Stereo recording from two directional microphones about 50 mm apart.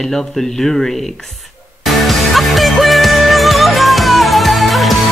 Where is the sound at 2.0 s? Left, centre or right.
Centre.